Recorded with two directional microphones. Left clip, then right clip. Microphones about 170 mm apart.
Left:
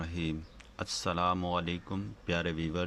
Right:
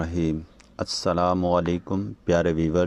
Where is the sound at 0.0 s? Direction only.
40° right (ahead or behind).